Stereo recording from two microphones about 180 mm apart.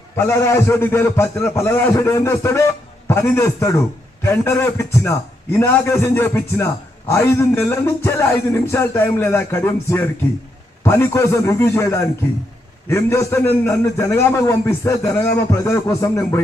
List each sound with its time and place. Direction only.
0.2 s a man's voice: 15° left (ahead or behind)